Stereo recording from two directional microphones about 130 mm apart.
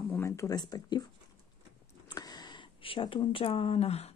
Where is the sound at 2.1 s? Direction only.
30° left (ahead or behind).